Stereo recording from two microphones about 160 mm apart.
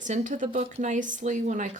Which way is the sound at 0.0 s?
50° right (ahead or behind).